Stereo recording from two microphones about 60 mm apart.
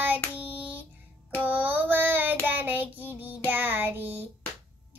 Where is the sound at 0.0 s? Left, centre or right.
Right.